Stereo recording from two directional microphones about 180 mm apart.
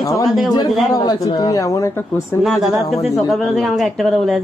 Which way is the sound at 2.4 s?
Centre (ahead or behind).